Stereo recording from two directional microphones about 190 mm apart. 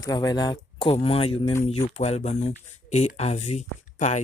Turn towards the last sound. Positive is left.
turn(degrees=40)  # may be behind; listen again after turning